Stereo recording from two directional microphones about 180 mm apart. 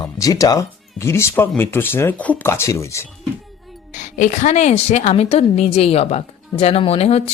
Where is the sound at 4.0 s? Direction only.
40° left (ahead or behind).